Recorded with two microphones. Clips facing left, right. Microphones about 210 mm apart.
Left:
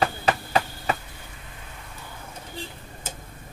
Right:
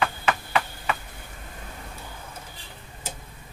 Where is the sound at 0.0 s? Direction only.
35° left (ahead or behind).